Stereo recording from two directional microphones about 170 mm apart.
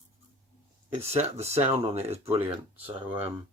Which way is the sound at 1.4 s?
35° right (ahead or behind).